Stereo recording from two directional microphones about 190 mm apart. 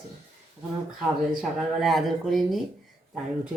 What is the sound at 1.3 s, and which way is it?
Speech, centre (ahead or behind).